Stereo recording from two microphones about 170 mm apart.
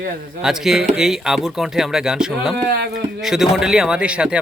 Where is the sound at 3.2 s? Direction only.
5° right (ahead or behind).